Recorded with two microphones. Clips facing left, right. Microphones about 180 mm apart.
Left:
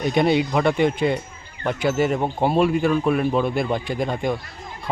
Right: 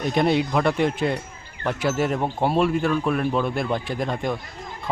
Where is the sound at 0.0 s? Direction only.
Centre (ahead or behind).